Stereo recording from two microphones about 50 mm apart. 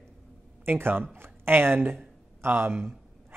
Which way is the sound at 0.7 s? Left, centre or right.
Right.